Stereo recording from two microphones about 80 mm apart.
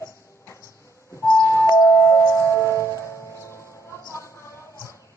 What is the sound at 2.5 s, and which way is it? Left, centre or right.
Music, left.